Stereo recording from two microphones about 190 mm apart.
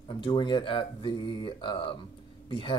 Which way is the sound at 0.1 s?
25° left (ahead or behind).